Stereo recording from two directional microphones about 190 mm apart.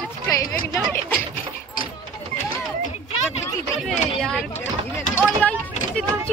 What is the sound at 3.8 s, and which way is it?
Speech, centre (ahead or behind).